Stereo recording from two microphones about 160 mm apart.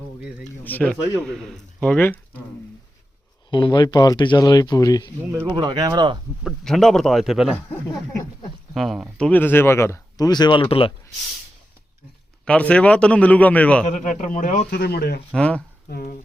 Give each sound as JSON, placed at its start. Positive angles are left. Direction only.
{"t": 0.6, "sound": "speech", "side_deg": 10}
{"t": 3.5, "sound": "speech", "side_deg": 30}
{"t": 5.5, "sound": "speech", "side_deg": -25}
{"t": 6.4, "sound": "a man's voice", "side_deg": 0}
{"t": 8.7, "sound": "speech", "side_deg": 0}
{"t": 9.1, "sound": "speech", "side_deg": 10}
{"t": 12.5, "sound": "speech", "side_deg": 5}
{"t": 13.8, "sound": "speech", "side_deg": 50}
{"t": 14.7, "sound": "speech", "side_deg": 90}
{"t": 15.3, "sound": "speech", "side_deg": 5}
{"t": 15.9, "sound": "speech", "side_deg": 65}